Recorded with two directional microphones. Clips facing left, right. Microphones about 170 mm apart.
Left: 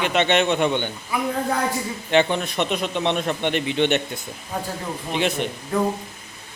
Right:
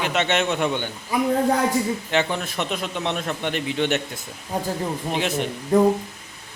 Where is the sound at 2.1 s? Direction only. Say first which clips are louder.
Left 8 dB; 5° right (ahead or behind).